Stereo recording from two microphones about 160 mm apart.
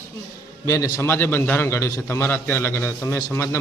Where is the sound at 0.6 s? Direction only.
20° left (ahead or behind).